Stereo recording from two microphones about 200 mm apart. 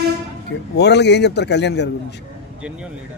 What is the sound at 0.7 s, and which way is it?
Speech, 60° left (ahead or behind).